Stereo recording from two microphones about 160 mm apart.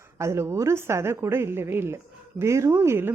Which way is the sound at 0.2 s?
15° right (ahead or behind).